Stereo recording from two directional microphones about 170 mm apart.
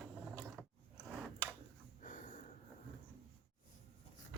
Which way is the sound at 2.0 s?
50° left (ahead or behind).